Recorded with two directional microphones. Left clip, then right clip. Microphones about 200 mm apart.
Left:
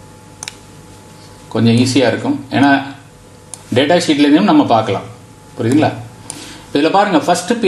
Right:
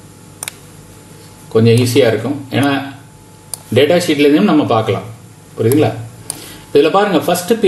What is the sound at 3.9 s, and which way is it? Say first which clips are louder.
Speech: even; 20° left (ahead or behind).